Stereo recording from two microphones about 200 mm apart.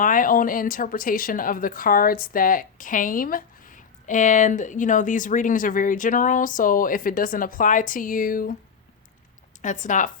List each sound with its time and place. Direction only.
0.0 s speech: 45° left (ahead or behind)
9.6 s speech: 40° left (ahead or behind)